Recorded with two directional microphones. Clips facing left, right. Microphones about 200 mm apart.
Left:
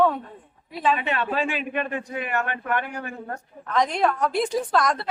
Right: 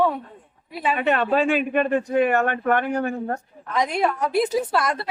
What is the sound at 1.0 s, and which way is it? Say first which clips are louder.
Speech: right 6 dB; 50° right (ahead or behind).